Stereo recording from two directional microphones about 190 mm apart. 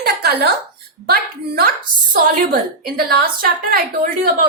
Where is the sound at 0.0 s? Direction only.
55° right (ahead or behind).